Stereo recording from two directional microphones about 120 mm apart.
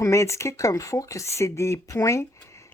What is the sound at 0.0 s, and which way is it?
Speech, 25° left (ahead or behind).